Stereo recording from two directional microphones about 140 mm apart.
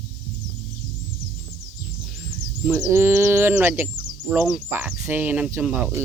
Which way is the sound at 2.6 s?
15° right (ahead or behind).